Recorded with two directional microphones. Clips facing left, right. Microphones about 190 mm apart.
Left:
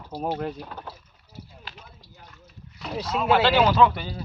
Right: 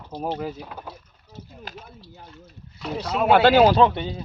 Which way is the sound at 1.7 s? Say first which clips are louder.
Right 6 dB; 45° right (ahead or behind).